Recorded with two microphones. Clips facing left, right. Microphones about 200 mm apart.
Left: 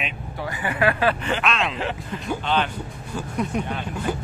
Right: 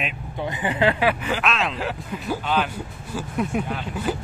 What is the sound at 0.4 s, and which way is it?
Speech, 20° right (ahead or behind).